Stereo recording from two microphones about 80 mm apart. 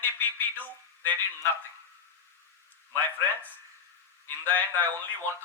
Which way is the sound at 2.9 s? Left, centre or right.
Left.